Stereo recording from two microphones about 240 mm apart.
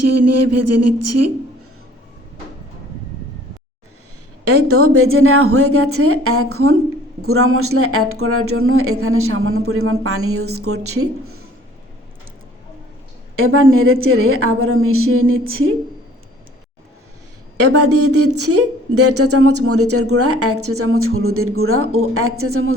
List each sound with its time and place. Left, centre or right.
0.0 s a sound: right
4.4 s speech: right
13.3 s speech: right
17.6 s a woman's voice: right